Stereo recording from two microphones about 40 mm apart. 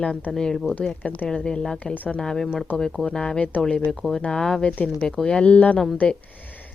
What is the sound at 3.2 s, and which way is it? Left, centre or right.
Speech, left.